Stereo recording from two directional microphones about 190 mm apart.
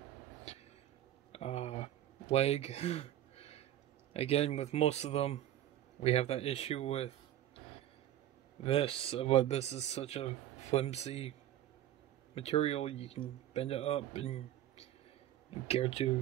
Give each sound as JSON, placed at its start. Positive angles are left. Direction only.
{"t": 0.5, "sound": "vehicle", "side_deg": 35}
{"t": 1.3, "sound": "a sound", "side_deg": 35}
{"t": 2.3, "sound": "speech", "side_deg": 35}
{"t": 8.6, "sound": "speech", "side_deg": 30}
{"t": 12.4, "sound": "speech", "side_deg": 30}